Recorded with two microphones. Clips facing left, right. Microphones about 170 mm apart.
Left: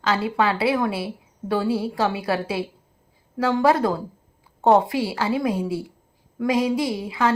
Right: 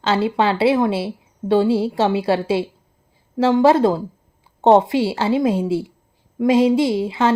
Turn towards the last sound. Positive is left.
turn(degrees=-25)  # may be behind; listen again after turning